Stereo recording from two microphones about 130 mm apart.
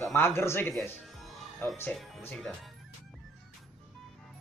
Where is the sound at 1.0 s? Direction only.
Centre (ahead or behind).